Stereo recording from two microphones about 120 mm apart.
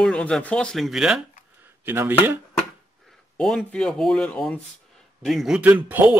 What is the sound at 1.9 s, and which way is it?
Speech, 20° right (ahead or behind).